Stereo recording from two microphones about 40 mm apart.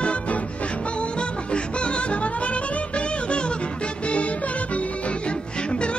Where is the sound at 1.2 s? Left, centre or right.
Left.